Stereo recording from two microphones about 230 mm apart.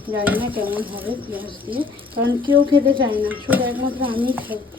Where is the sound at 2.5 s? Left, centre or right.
Right.